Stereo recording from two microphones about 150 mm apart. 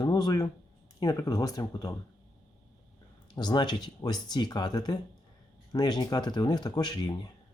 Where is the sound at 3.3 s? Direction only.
30° left (ahead or behind).